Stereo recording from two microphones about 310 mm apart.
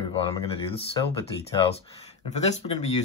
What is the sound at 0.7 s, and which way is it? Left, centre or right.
Speech, centre.